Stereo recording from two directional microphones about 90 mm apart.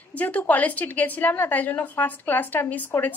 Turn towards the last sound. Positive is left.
turn(degrees=20)  # may be behind; listen again after turning